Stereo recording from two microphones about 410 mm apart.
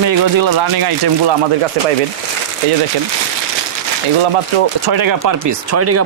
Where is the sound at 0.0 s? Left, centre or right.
Right.